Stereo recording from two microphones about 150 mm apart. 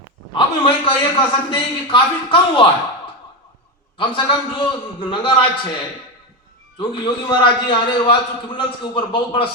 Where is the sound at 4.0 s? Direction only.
35° left (ahead or behind).